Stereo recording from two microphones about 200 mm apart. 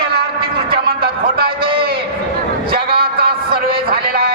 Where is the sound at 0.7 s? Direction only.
50° right (ahead or behind).